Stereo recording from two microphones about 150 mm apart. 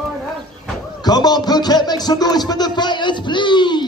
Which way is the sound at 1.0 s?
25° left (ahead or behind).